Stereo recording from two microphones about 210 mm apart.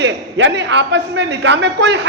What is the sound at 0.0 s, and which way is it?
A man's voice, 60° right (ahead or behind).